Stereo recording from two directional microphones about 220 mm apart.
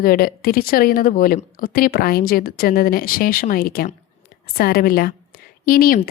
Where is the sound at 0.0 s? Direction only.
40° left (ahead or behind).